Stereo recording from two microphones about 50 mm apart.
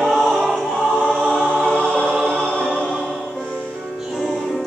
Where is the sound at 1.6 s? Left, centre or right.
Left.